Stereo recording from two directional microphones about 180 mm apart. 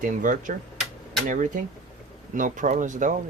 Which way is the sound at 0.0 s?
45° right (ahead or behind).